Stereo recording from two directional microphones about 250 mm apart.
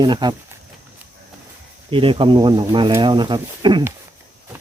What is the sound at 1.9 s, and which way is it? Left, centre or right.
Speech, right.